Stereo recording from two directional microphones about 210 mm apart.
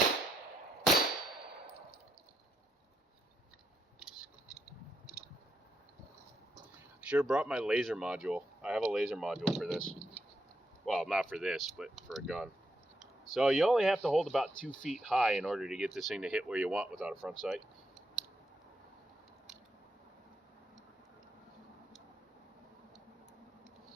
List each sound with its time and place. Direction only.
6.7 s speech: 5° right (ahead or behind)
10.8 s speech: centre (ahead or behind)